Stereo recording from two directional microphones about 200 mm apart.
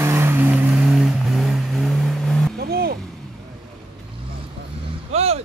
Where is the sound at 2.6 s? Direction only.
50° right (ahead or behind).